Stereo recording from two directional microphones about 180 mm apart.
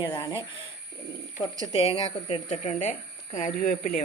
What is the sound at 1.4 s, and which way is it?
Speech, 25° left (ahead or behind).